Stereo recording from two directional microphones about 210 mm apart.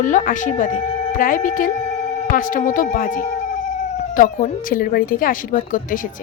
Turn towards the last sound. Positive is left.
turn(degrees=40)  # may be behind; listen again after turning